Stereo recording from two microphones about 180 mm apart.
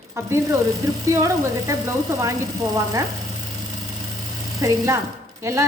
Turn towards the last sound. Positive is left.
turn(degrees=-15)  # may be behind; listen again after turning